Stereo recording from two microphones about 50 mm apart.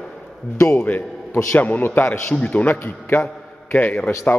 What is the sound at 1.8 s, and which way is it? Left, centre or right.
Speech, left.